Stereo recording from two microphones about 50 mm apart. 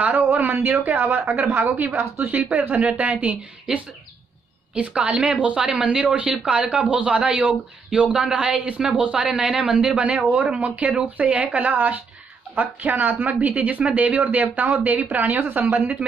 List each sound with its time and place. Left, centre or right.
0.0 s a woman's voice: right